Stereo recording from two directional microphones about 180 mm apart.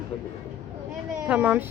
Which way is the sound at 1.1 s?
5° right (ahead or behind).